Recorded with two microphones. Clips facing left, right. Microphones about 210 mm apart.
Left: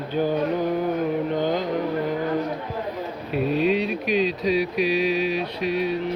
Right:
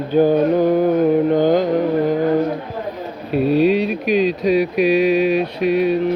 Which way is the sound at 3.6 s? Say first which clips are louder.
Right 6 dB; 40° right (ahead or behind).